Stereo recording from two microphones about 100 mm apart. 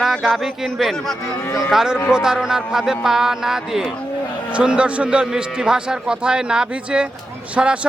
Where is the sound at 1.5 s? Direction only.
25° left (ahead or behind).